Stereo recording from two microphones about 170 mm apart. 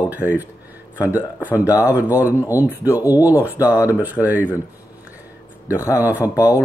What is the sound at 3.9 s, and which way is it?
Speech, 10° right (ahead or behind).